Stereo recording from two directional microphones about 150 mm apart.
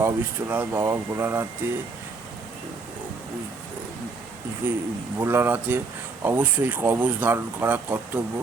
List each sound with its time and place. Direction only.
0.0 s speech: 15° right (ahead or behind)
4.6 s speech: 10° right (ahead or behind)